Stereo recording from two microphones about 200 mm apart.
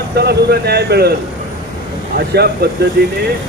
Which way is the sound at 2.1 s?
55° right (ahead or behind).